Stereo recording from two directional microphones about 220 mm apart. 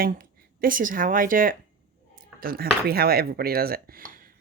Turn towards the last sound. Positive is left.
turn(degrees=-40)  # may be behind; listen again after turning